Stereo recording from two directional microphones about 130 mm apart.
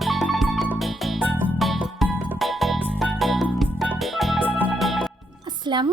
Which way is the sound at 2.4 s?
Centre (ahead or behind).